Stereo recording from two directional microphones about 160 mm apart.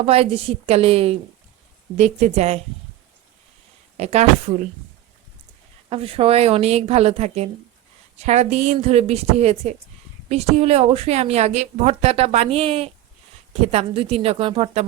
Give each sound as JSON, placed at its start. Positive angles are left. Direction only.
{"t": 0.0, "sound": "a woman's voice", "side_deg": -35}
{"t": 3.9, "sound": "a woman's voice", "side_deg": -45}
{"t": 5.9, "sound": "a woman's voice", "side_deg": -35}